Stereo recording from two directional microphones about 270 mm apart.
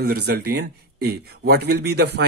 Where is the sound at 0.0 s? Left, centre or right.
Right.